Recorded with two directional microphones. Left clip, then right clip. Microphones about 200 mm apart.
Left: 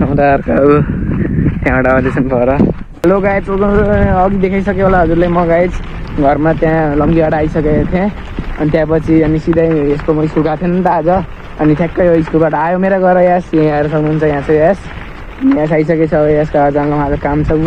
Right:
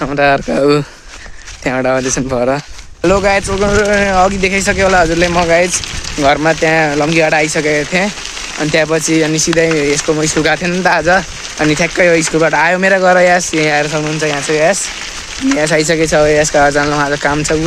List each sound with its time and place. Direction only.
0.0 s speech: 20° right (ahead or behind)
10.1 s speech: 30° right (ahead or behind)
10.4 s speech: 10° right (ahead or behind)
12.4 s speech: 30° right (ahead or behind)
12.6 s speech: 15° right (ahead or behind)
13.7 s speech: 5° right (ahead or behind)
16.1 s speech: 30° right (ahead or behind)